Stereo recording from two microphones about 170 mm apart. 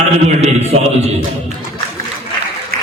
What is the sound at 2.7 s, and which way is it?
Applause, 60° right (ahead or behind).